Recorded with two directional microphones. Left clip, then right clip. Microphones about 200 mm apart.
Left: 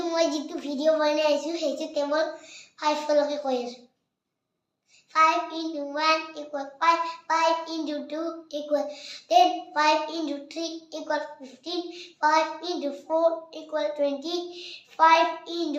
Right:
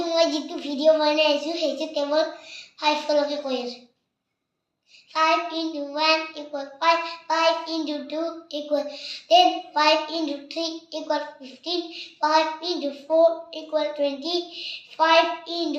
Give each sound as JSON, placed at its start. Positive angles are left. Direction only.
{"t": 0.1, "sound": "a child's voice", "side_deg": 15}
{"t": 5.3, "sound": "a child's voice", "side_deg": 15}